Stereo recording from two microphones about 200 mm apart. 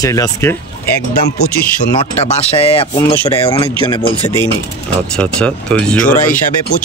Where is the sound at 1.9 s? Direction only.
30° left (ahead or behind).